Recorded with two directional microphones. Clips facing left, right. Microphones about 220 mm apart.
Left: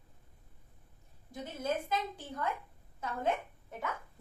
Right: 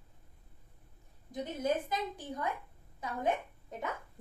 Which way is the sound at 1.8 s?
15° right (ahead or behind).